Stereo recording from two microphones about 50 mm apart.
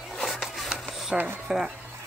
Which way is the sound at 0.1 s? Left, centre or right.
Centre.